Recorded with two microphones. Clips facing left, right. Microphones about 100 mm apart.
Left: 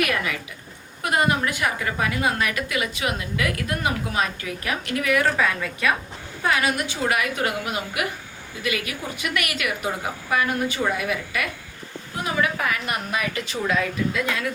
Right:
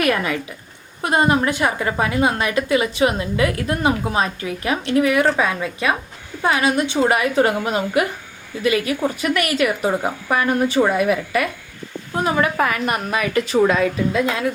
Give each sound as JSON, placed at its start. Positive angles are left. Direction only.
{"t": 0.0, "sound": "a woman's voice", "side_deg": -35}
{"t": 13.7, "sound": "a woman's voice", "side_deg": -40}
{"t": 14.2, "sound": "a woman's voice", "side_deg": -25}